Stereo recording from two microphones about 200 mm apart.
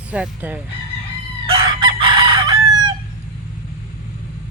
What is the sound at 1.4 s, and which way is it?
Chicken, 25° right (ahead or behind).